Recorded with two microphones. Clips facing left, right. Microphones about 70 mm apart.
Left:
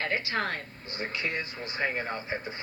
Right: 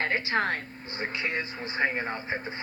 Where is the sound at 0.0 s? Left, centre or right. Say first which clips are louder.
Right 3 dB; right.